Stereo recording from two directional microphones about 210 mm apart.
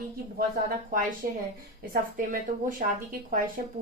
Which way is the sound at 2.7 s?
40° right (ahead or behind).